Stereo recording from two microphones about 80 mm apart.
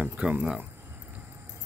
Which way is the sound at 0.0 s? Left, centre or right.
Centre.